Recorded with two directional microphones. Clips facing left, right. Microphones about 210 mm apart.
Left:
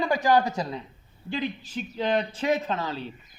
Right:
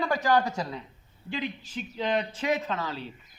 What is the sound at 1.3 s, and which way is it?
A man's voice, 35° left (ahead or behind).